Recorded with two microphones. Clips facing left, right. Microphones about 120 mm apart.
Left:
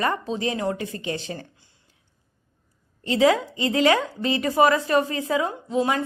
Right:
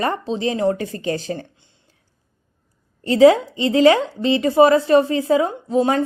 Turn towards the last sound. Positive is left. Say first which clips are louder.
# right 5 dB
turn(degrees=-30)  # may be behind; listen again after turning